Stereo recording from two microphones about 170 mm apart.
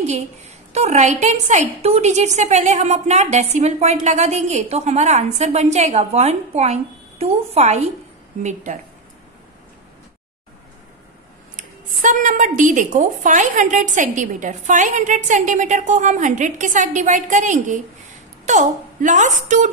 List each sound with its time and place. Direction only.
0.0 s a woman's voice: 40° right (ahead or behind)
11.5 s a woman's voice: 45° right (ahead or behind)